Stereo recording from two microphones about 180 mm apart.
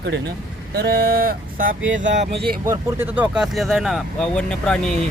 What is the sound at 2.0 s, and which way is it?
Speech, 45° right (ahead or behind).